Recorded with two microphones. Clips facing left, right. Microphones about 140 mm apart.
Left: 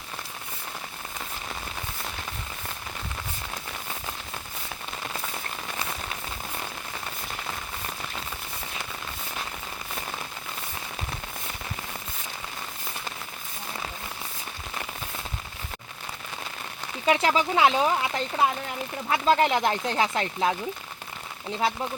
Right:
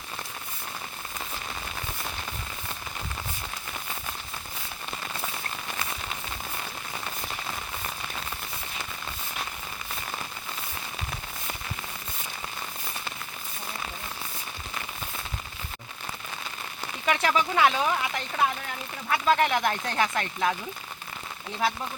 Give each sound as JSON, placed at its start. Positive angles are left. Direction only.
{"t": 17.1, "sound": "speech", "side_deg": 25}